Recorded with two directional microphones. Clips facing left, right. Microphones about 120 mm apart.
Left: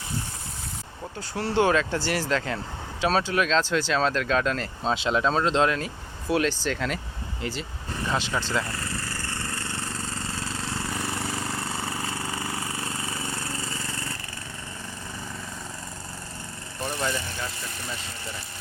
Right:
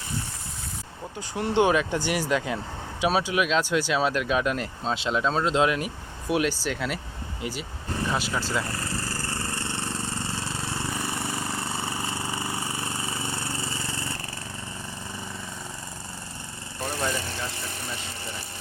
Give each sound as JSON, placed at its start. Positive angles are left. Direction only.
{"t": 1.3, "sound": "speech", "side_deg": -15}
{"t": 4.8, "sound": "speech", "side_deg": 0}
{"t": 8.6, "sound": "vehicle", "side_deg": -35}
{"t": 10.5, "sound": "vehicle", "side_deg": -5}
{"t": 12.1, "sound": "lawn mower", "side_deg": -25}
{"t": 13.7, "sound": "vehicle", "side_deg": -25}